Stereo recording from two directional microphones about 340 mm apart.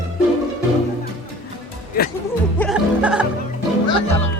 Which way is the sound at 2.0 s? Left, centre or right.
Left.